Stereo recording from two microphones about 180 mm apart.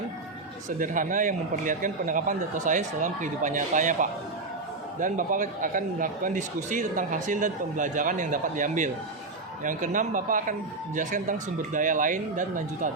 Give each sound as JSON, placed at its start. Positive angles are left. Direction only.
{"t": 0.8, "sound": "speech", "side_deg": -45}